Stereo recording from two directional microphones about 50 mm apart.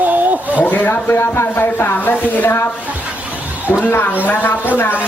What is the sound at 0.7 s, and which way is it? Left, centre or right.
Speech, left.